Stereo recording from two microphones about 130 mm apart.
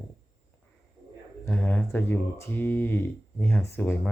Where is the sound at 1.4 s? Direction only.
15° left (ahead or behind).